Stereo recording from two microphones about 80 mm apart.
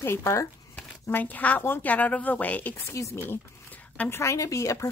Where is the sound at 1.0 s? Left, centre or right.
Left.